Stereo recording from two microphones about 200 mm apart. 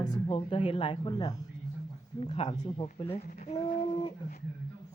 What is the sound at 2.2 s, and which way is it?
Speech, 35° left (ahead or behind).